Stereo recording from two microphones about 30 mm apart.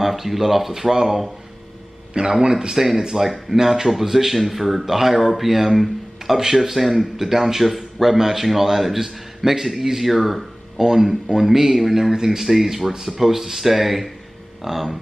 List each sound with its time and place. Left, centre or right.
0.0 s speech: centre
2.4 s speech: right; by 15.0 s centre